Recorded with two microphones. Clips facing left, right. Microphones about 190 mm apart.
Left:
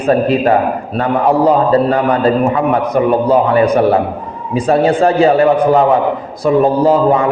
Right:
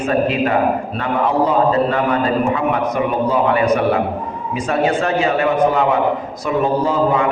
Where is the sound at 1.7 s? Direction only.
35° left (ahead or behind).